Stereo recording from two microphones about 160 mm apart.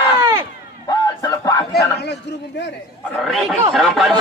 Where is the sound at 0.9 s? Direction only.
20° left (ahead or behind).